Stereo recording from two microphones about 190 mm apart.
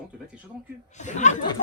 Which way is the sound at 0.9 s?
40° left (ahead or behind).